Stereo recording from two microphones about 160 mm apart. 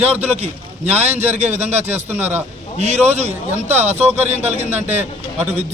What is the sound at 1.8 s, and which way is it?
Speech, 15° right (ahead or behind).